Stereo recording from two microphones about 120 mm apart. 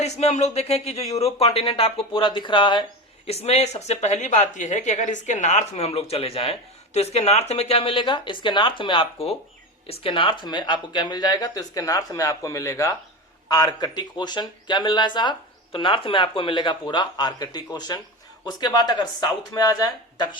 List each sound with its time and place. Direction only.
0.0 s speech: 65° left (ahead or behind); by 2.8 s 40° left (ahead or behind)
3.2 s speech: 60° left (ahead or behind); by 20.3 s 35° left (ahead or behind)